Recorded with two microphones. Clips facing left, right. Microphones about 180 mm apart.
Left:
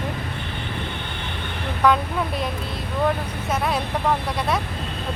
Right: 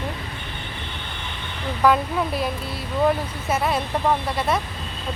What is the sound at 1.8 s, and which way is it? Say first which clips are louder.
Speech: right 1 dB; 5° right (ahead or behind).